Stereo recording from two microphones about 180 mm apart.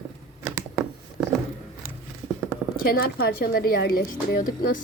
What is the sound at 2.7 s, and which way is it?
Speech, 55° left (ahead or behind).